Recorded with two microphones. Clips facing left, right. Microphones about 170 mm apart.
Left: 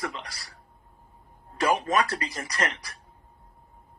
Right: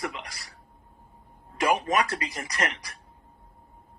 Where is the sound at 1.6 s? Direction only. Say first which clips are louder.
Even; 15° right (ahead or behind).